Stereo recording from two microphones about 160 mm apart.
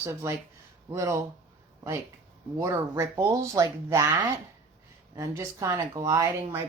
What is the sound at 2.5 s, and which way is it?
Speech, 20° right (ahead or behind).